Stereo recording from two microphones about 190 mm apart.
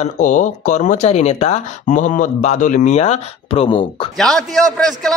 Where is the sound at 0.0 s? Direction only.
40° left (ahead or behind).